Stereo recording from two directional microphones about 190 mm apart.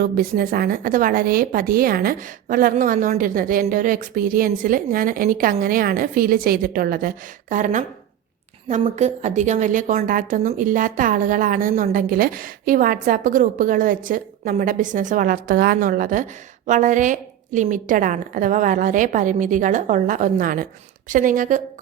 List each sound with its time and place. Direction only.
0.0 s a woman's voice: 50° right (ahead or behind)